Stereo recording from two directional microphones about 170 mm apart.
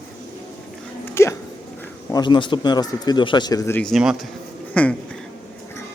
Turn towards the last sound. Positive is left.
turn(degrees=10)  # may be behind; listen again after turning